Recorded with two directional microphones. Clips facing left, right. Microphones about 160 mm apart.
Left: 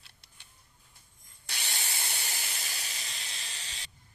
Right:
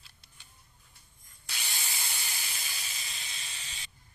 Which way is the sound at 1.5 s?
70° left (ahead or behind).